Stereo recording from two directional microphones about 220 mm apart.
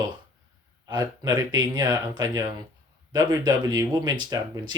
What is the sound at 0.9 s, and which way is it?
Speech, 20° right (ahead or behind).